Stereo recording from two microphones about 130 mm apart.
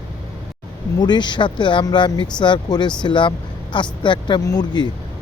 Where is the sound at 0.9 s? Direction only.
35° left (ahead or behind).